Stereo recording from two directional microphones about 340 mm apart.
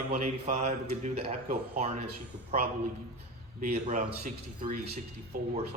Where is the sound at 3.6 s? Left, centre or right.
Right.